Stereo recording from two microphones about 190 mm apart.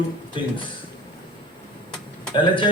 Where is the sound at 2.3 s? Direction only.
25° left (ahead or behind).